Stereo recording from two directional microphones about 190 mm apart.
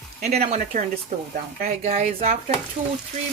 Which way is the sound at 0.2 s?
40° right (ahead or behind).